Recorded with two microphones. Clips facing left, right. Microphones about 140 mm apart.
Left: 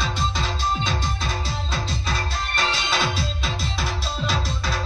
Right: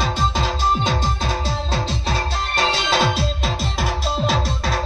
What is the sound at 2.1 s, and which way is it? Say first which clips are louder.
Music: right 4 dB; 40° right (ahead or behind).